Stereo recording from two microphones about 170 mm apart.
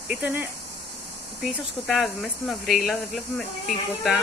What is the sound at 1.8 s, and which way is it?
Speech, centre (ahead or behind).